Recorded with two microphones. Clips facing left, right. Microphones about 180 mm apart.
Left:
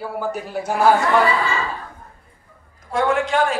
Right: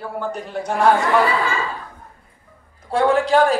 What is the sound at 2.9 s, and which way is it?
Speech, 30° right (ahead or behind).